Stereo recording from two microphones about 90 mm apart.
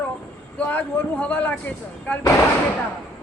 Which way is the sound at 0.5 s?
15° left (ahead or behind).